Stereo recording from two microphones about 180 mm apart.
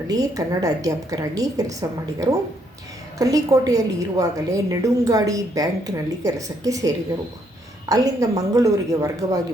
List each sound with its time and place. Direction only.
0.1 s a woman's voice: 20° right (ahead or behind)
3.2 s a woman's voice: 20° right (ahead or behind)